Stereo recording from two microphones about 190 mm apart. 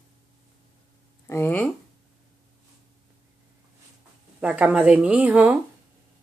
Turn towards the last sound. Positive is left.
turn(degrees=-10)  # may be behind; listen again after turning